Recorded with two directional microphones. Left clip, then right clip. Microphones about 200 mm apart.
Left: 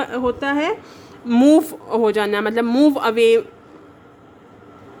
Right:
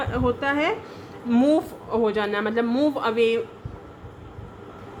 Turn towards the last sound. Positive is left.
turn(degrees=55)  # may be behind; listen again after turning